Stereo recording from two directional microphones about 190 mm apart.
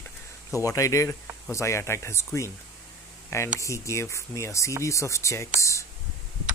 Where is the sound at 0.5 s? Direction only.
15° left (ahead or behind).